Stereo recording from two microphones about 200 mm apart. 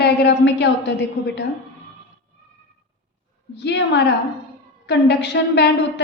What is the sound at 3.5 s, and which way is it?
A woman's voice, 60° left (ahead or behind).